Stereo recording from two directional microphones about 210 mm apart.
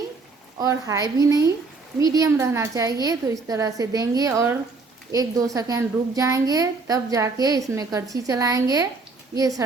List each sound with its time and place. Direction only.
0.6 s a woman's voice: 15° right (ahead or behind)
5.5 s a woman's voice: 15° right (ahead or behind)